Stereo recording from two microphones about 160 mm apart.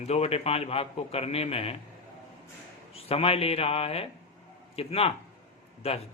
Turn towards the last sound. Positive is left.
turn(degrees=40)  # may be behind; listen again after turning